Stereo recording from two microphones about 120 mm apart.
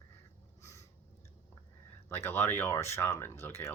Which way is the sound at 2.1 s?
20° left (ahead or behind).